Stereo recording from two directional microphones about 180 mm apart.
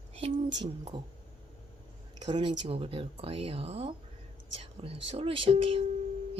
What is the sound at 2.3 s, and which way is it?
Speech, 25° right (ahead or behind).